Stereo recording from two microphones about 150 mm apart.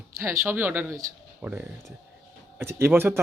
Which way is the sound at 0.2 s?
15° right (ahead or behind).